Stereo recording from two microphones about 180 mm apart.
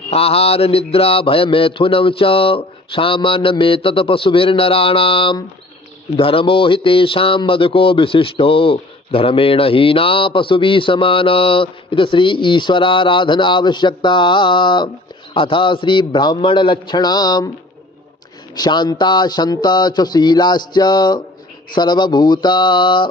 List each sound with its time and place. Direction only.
0.1 s mantra: 35° left (ahead or behind)
6.1 s speech: 30° left (ahead or behind)
18.5 s speech: 25° left (ahead or behind)